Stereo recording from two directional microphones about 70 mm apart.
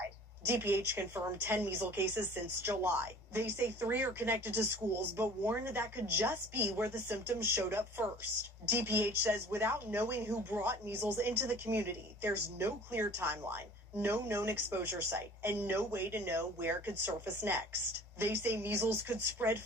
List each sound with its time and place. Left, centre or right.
0.4 s a woman's voice: right